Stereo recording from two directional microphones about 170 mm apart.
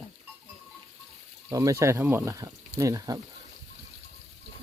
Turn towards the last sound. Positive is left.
turn(degrees=-20)  # may be behind; listen again after turning